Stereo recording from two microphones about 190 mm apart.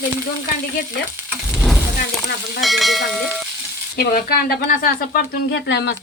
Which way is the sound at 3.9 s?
55° left (ahead or behind).